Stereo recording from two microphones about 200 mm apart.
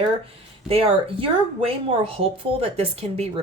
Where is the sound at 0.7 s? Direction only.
30° right (ahead or behind).